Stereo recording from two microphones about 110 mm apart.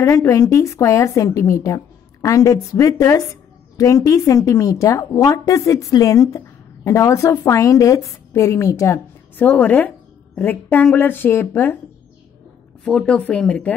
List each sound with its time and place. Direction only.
0.0 s a woman's voice: 25° left (ahead or behind)
9.4 s a woman's voice: 15° left (ahead or behind)
12.8 s speech: 5° left (ahead or behind)